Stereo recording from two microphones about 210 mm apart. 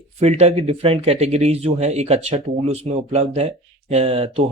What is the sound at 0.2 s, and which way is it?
Speech, 30° right (ahead or behind).